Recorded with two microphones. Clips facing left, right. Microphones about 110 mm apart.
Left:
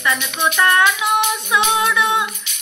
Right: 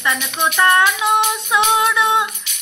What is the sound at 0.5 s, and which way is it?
Female singing, 25° right (ahead or behind).